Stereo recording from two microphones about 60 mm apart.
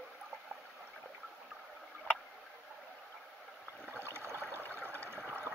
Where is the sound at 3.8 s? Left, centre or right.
Right.